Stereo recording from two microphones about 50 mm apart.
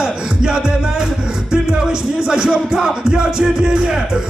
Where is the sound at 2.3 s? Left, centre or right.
Centre.